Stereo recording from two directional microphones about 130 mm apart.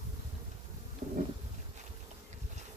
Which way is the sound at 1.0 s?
55° right (ahead or behind).